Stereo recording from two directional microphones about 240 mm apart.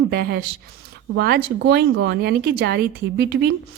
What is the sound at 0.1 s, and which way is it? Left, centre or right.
Speech, right.